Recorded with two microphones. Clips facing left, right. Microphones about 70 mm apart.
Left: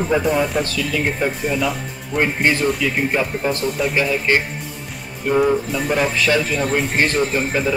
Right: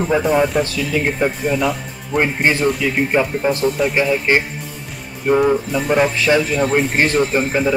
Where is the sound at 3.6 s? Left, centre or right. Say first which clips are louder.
Right 4 dB; centre.